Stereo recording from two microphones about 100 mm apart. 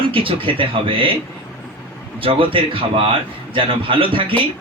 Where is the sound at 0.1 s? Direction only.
60° right (ahead or behind).